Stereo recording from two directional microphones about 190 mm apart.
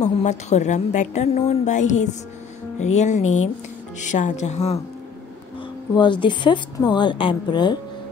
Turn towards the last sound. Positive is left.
turn(degrees=25)  # may be behind; listen again after turning